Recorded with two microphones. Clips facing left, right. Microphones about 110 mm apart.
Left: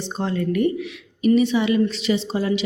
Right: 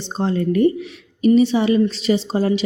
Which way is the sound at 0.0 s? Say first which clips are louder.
Right 3 dB; 30° right (ahead or behind).